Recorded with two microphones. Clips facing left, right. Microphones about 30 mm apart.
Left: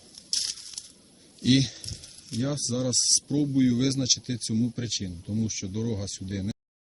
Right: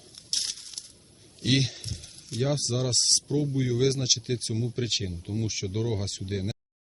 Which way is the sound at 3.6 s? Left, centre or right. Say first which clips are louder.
Left 2 dB; centre.